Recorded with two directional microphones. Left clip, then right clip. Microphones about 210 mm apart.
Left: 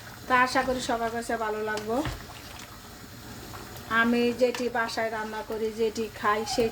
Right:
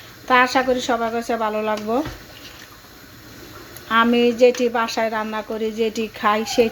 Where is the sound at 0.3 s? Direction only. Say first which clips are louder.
Right 7 dB; 15° right (ahead or behind).